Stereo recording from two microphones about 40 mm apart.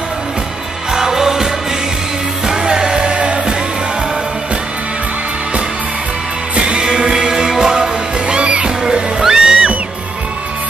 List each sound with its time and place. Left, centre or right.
0.9 s music: centre
6.5 s music: right
6.8 s music: centre